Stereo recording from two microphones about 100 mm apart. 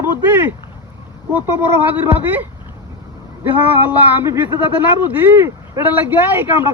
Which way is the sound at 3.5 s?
20° right (ahead or behind).